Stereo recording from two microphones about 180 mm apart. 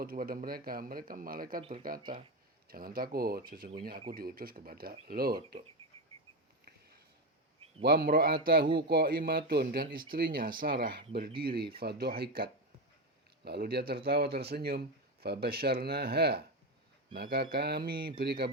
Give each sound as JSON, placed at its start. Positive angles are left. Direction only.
{"t": 0.0, "sound": "speech", "side_deg": -55}
{"t": 5.8, "sound": "a sound", "side_deg": -30}
{"t": 7.9, "sound": "speech", "side_deg": -55}